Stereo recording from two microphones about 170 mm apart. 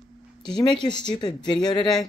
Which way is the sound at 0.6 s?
25° left (ahead or behind).